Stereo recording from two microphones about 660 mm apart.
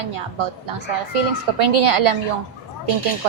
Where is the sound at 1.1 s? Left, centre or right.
Right.